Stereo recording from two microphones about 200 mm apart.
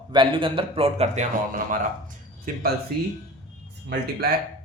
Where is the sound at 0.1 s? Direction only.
25° right (ahead or behind).